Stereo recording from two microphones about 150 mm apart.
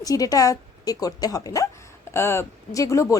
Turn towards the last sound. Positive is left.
turn(degrees=20)  # may be behind; listen again after turning